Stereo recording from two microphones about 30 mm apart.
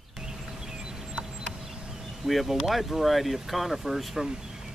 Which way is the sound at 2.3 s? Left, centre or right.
Centre.